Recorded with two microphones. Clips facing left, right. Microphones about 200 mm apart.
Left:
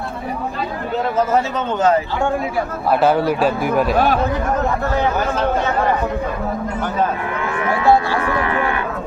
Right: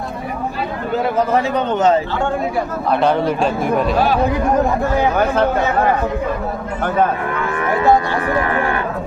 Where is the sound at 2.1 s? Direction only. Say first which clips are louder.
Right 1 dB; 5° left (ahead or behind).